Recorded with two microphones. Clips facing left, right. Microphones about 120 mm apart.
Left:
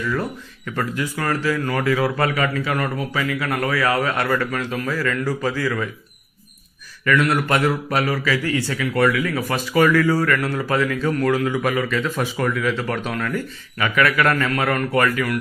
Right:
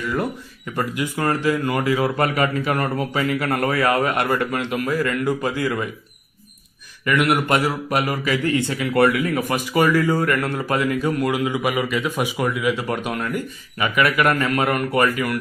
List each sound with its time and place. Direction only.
0.7 s speech: 15° right (ahead or behind)
7.1 s speech: 20° right (ahead or behind)